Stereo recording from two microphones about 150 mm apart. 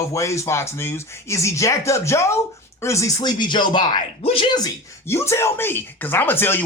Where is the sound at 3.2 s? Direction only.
30° left (ahead or behind).